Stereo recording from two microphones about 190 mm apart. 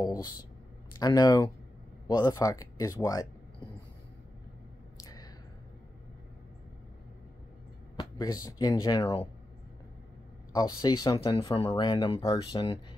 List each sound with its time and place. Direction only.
0.0 s speech: 20° left (ahead or behind)
7.9 s speech: 20° left (ahead or behind)
10.5 s speech: 20° left (ahead or behind)